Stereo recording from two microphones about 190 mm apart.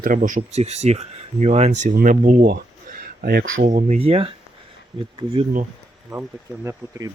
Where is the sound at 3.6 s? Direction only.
40° right (ahead or behind).